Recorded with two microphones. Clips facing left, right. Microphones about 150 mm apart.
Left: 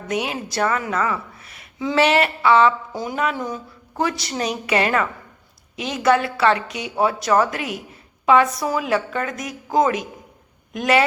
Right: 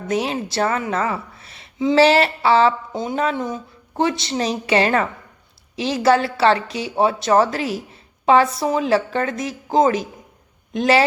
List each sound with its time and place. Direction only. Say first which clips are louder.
0.1 s a woman's voice: right 3 dB; 30° right (ahead or behind)